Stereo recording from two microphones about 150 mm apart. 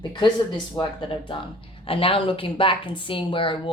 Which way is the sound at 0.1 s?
30° left (ahead or behind).